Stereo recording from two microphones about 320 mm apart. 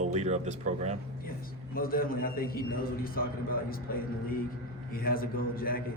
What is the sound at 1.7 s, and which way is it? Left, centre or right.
A man's voice, left.